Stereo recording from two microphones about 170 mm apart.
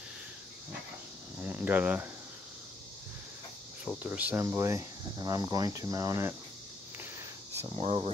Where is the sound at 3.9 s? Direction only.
10° right (ahead or behind).